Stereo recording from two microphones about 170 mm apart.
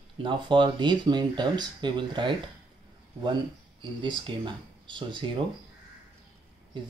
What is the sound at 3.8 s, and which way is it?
Speech, 30° right (ahead or behind).